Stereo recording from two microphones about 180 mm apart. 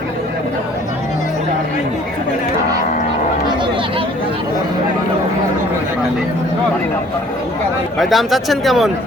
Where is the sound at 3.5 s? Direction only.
25° right (ahead or behind).